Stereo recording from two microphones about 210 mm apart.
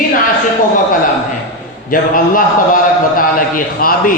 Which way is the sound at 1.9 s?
40° left (ahead or behind).